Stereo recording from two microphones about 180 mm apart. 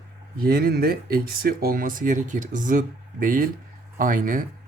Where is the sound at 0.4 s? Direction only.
55° right (ahead or behind).